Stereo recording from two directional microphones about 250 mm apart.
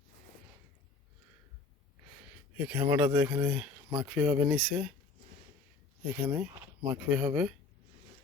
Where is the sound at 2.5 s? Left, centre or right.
Centre.